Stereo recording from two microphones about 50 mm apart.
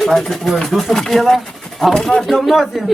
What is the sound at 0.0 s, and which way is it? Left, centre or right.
A man's voice, centre.